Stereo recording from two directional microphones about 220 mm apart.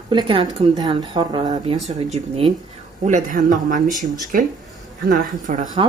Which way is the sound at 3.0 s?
35° right (ahead or behind).